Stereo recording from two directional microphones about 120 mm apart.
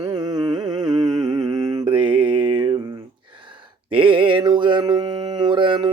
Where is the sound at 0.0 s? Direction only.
35° right (ahead or behind).